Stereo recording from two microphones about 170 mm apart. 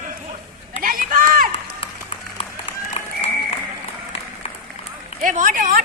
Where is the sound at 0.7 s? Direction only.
50° right (ahead or behind).